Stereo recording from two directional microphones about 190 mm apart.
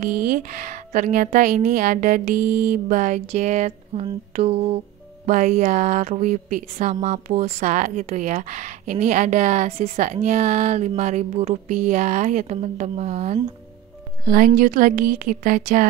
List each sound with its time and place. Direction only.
0.0 s a woman's voice: 45° right (ahead or behind)